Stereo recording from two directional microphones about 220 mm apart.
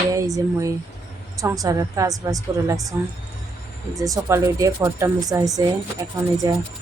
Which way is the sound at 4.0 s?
15° right (ahead or behind).